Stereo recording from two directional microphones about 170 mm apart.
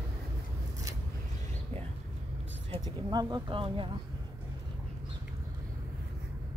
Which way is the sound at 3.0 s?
25° right (ahead or behind).